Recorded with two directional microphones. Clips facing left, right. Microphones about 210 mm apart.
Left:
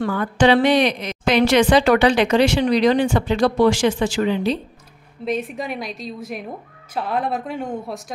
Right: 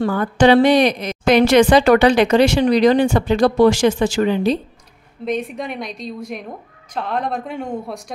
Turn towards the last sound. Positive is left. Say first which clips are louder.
# right 1 dB
turn(degrees=5)  # may be behind; listen again after turning